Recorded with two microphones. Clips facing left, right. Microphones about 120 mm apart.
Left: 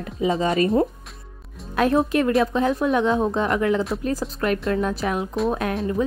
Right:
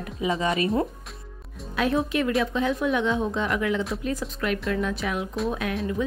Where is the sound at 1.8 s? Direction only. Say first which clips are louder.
Left 5 dB; 45° left (ahead or behind).